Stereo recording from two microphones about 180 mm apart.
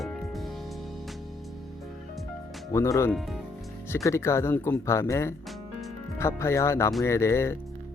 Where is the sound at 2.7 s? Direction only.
15° left (ahead or behind).